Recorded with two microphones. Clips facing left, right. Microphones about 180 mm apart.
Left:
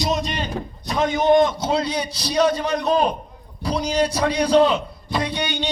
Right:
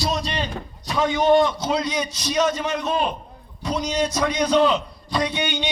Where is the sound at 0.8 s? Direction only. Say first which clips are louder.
Even; 40° left (ahead or behind).